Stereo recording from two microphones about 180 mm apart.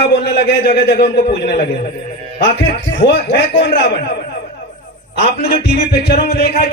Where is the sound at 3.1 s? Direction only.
70° left (ahead or behind).